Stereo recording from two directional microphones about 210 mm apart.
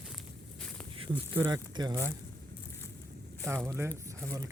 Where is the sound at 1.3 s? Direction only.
25° right (ahead or behind).